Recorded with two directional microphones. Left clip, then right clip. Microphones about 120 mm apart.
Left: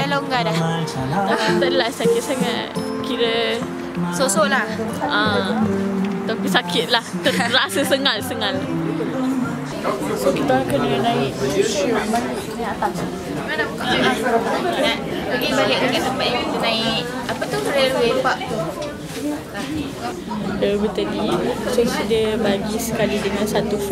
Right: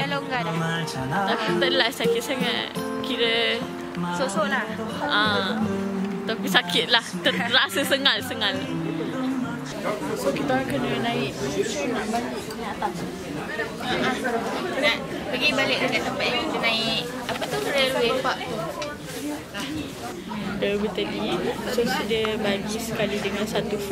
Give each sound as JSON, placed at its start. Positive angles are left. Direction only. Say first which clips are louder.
{"t": 0.0, "sound": "music", "louder": "left 6 dB", "side_deg": 10}
{"t": 1.6, "sound": "speech", "louder": "left 3 dB", "side_deg": -10}
{"t": 4.2, "sound": "a woman's voice", "louder": "left 7 dB", "side_deg": 20}
{"t": 5.0, "sound": "speech", "louder": "left 3 dB", "side_deg": -5}
{"t": 10.3, "sound": "speech", "louder": "left 6 dB", "side_deg": 5}
{"t": 15.4, "sound": "speech", "louder": "left 3 dB", "side_deg": -5}
{"t": 20.6, "sound": "speech", "louder": "left 5 dB", "side_deg": 5}